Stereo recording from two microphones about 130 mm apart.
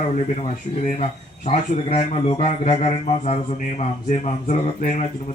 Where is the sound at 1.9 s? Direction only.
55° left (ahead or behind).